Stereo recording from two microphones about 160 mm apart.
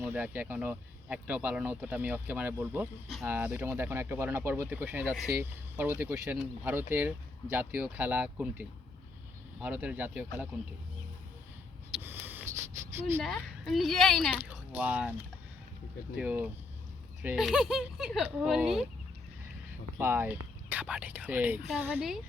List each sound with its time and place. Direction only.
0.0 s speech: 10° right (ahead or behind)
12.0 s sniff: 10° right (ahead or behind)
13.2 s speech: centre (ahead or behind)
14.4 s speech: 10° right (ahead or behind)
16.1 s speech: 10° right (ahead or behind)
20.0 s speech: 15° right (ahead or behind)